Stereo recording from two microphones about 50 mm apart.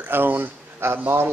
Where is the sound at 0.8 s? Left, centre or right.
Right.